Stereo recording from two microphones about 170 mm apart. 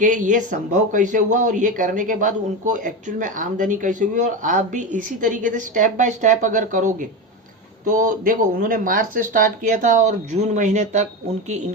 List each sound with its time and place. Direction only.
0.0 s speech: 50° right (ahead or behind)